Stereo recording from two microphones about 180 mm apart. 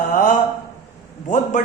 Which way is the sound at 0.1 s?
45° left (ahead or behind).